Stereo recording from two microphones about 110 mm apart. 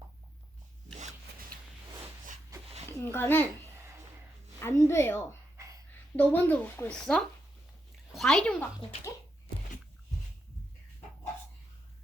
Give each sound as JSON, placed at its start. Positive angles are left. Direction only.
{"t": 3.0, "sound": "speech", "side_deg": 20}
{"t": 4.6, "sound": "speech", "side_deg": 25}
{"t": 5.5, "sound": "a sound", "side_deg": -30}
{"t": 6.1, "sound": "speech", "side_deg": 15}